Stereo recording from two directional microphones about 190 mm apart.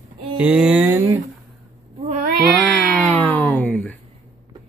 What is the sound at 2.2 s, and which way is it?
Cat, 55° right (ahead or behind).